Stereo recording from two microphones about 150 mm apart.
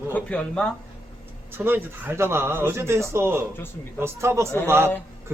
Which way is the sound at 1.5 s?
15° right (ahead or behind).